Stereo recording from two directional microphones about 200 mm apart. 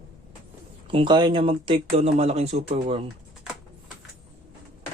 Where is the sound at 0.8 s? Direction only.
25° right (ahead or behind).